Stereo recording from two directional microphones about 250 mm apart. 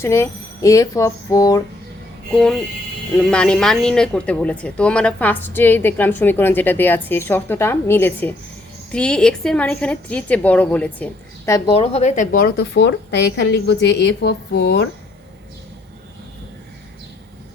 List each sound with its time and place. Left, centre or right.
0.0 s a woman's voice: centre
3.2 s a woman's voice: centre; by 14.8 s left